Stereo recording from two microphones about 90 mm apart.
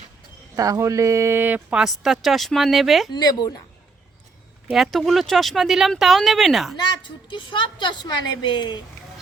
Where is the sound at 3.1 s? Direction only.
50° left (ahead or behind).